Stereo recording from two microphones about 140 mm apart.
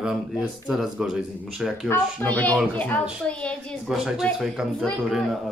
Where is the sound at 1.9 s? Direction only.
10° left (ahead or behind).